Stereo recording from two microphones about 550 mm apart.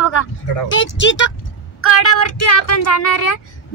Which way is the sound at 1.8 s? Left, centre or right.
Left.